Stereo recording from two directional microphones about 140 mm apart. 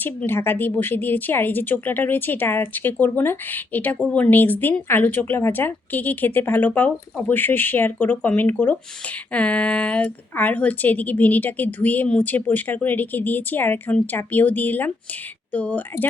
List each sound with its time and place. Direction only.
0.0 s a woman's voice: 15° left (ahead or behind)